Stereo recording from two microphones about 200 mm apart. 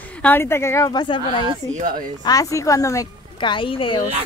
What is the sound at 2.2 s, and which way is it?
Speech, 15° left (ahead or behind).